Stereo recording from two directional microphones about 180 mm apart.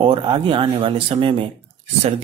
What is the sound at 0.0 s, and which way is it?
Speech, 30° right (ahead or behind).